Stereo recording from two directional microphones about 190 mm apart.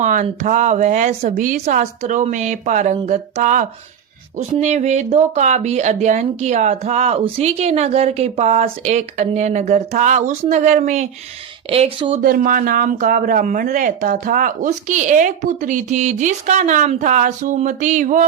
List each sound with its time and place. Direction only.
0.0 s speech: 40° right (ahead or behind)
11.7 s speech: 30° right (ahead or behind)
12.2 s speech: 45° right (ahead or behind)